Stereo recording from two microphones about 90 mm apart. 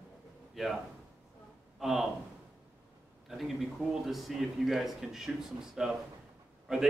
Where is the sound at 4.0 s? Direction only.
Centre (ahead or behind).